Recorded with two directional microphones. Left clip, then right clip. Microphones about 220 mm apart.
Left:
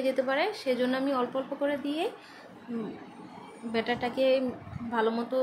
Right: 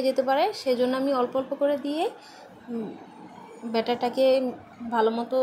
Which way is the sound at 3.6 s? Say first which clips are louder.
Right 4 dB; 20° right (ahead or behind).